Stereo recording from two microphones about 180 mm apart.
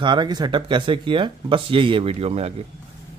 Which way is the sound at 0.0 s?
25° right (ahead or behind).